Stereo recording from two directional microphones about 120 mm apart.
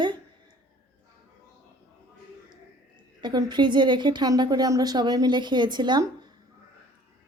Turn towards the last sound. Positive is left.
turn(degrees=-35)  # may be behind; listen again after turning